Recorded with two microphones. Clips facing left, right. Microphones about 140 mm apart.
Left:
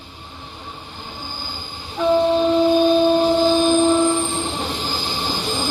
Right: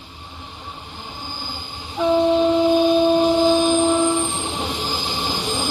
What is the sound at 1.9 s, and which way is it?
Train, 15° right (ahead or behind).